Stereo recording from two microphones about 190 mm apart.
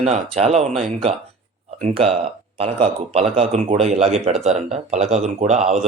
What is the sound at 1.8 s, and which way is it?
Speech, 30° right (ahead or behind).